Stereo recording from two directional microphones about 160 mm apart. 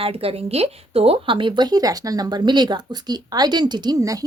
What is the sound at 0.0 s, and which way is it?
Speech, 35° right (ahead or behind).